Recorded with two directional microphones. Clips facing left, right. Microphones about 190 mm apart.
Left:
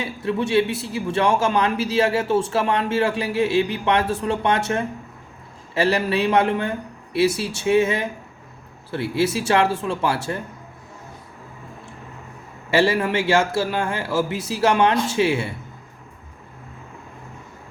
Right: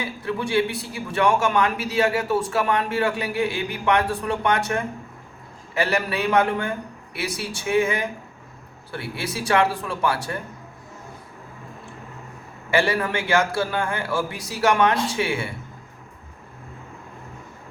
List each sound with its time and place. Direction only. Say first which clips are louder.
0.0 s a man's voice: left 3 dB; 25° left (ahead or behind)
12.7 s a man's voice: left 3 dB; 25° left (ahead or behind)